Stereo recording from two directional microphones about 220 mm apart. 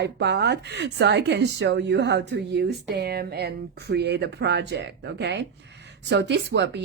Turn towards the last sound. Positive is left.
turn(degrees=-50)  # may be behind; listen again after turning